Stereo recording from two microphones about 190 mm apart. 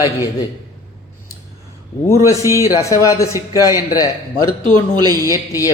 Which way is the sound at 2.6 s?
20° left (ahead or behind).